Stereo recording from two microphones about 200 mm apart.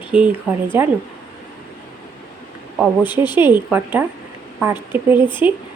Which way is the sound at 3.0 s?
20° left (ahead or behind).